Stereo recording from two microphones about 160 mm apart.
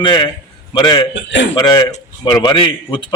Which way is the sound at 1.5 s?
25° left (ahead or behind).